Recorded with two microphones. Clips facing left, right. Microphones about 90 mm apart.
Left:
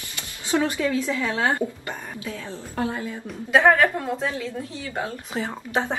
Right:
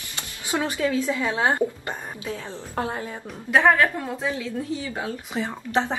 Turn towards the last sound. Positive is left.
turn(degrees=0)  # may be behind; listen again after turning